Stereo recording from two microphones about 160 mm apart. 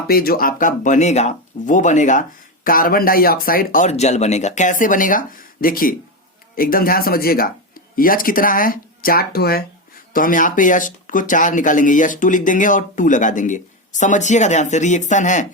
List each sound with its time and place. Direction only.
0.1 s speech: 70° left (ahead or behind); by 2.2 s 50° left (ahead or behind)
2.6 s speech: 60° left (ahead or behind)
10.1 s speech: 60° left (ahead or behind)